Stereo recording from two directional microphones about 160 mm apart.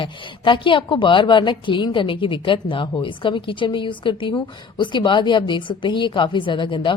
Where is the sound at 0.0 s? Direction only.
30° left (ahead or behind).